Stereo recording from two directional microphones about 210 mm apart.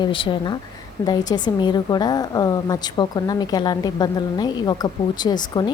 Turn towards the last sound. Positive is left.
turn(degrees=20)  # may be behind; listen again after turning